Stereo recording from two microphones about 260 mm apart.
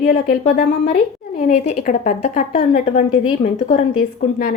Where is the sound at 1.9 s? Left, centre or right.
Left.